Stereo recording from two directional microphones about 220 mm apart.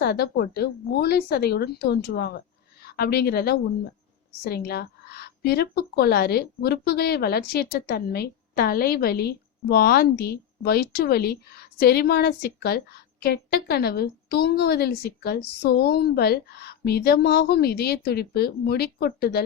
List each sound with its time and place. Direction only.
0.0 s speech: 45° left (ahead or behind)